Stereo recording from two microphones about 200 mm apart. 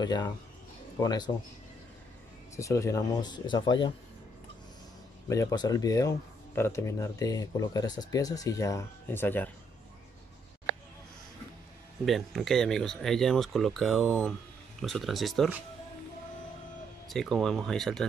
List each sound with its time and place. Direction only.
0.0 s speech: 20° left (ahead or behind)
2.5 s speech: 15° left (ahead or behind)
5.3 s speech: 20° left (ahead or behind)
12.0 s speech: centre (ahead or behind)
17.1 s speech: centre (ahead or behind)